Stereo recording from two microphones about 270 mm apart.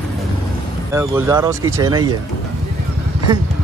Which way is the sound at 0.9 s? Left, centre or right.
Centre.